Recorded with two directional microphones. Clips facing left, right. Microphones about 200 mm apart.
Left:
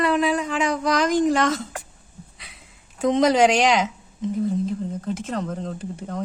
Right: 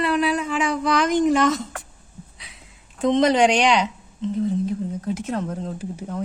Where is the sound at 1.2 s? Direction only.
Centre (ahead or behind).